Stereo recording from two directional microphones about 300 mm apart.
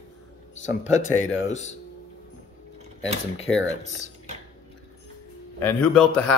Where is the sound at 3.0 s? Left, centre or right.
Left.